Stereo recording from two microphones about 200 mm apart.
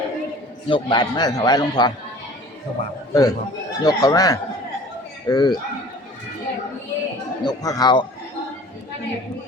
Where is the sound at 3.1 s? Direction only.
20° left (ahead or behind).